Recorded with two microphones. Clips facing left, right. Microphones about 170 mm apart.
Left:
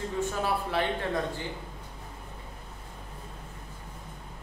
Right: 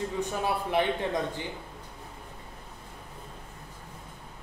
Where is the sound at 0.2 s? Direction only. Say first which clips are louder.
Left 2 dB; 15° right (ahead or behind).